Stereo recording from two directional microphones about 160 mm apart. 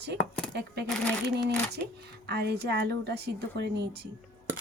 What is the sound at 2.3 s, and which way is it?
A woman's voice, 90° right.